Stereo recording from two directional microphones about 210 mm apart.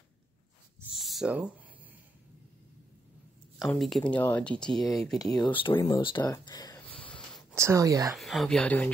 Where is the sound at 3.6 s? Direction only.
Centre (ahead or behind).